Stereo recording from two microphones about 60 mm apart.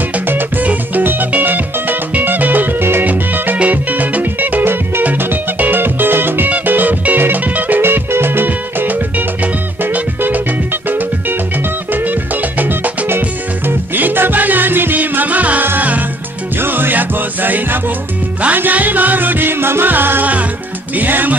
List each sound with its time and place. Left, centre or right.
0.3 s music: right